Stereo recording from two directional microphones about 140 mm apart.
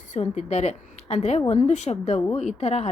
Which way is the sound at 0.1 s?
55° left (ahead or behind).